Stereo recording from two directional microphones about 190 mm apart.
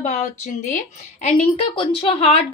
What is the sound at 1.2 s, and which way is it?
A woman's voice, 30° left (ahead or behind).